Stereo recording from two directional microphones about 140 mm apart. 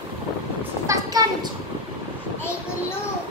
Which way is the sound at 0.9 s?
25° right (ahead or behind).